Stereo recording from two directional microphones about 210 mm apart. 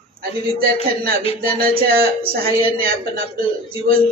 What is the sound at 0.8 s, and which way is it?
Speech, 45° right (ahead or behind).